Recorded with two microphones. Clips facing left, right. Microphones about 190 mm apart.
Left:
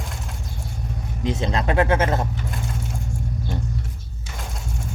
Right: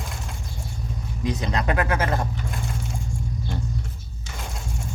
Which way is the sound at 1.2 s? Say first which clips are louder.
Left 2 dB; 25° left (ahead or behind).